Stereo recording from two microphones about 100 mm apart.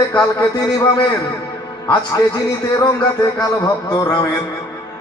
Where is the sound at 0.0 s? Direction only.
35° left (ahead or behind).